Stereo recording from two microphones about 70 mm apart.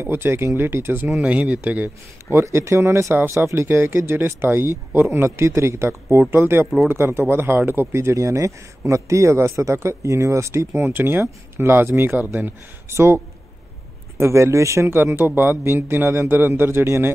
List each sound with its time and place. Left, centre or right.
0.0 s speech: right
1.2 s speech: centre
2.3 s speech: right
10.7 s speech: right